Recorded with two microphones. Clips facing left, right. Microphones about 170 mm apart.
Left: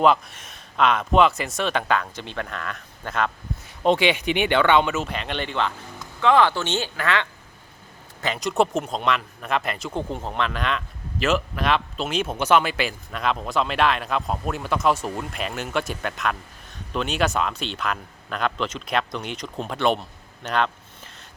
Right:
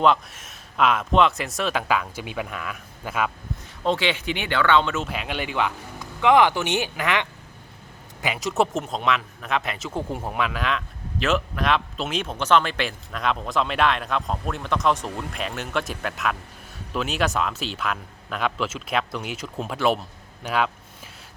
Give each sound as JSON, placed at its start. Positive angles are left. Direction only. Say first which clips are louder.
{"t": 0.0, "sound": "speech", "louder": "left 1 dB", "side_deg": 0}
{"t": 3.8, "sound": "speech", "louder": "left 4 dB", "side_deg": 15}
{"t": 4.9, "sound": "speech", "louder": "left 1 dB", "side_deg": -5}
{"t": 8.2, "sound": "speech", "louder": "left 1 dB", "side_deg": -5}